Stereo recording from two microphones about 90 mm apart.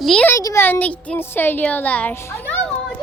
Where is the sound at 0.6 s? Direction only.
20° left (ahead or behind).